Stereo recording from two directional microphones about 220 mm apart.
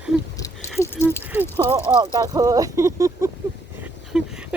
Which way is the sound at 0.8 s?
10° left (ahead or behind).